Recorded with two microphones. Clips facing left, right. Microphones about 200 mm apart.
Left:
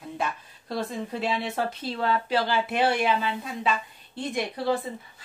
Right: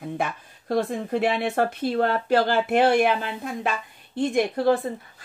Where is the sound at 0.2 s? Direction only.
55° right (ahead or behind).